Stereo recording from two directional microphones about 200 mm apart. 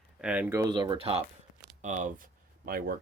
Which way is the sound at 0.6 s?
20° right (ahead or behind).